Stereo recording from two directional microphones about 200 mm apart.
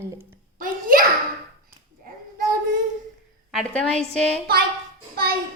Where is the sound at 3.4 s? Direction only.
Centre (ahead or behind).